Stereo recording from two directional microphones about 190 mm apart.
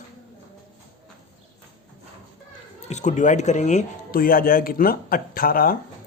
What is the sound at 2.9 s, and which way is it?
Speech, 40° left (ahead or behind).